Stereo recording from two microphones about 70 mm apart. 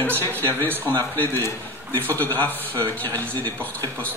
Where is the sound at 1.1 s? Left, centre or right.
Left.